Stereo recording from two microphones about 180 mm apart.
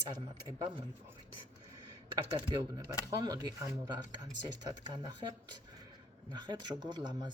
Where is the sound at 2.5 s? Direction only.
20° right (ahead or behind).